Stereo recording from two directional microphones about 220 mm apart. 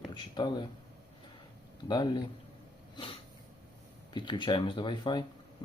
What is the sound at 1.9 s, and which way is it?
Speech, 20° left (ahead or behind).